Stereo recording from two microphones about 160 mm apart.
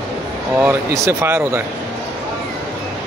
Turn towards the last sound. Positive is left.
turn(degrees=-15)  # may be behind; listen again after turning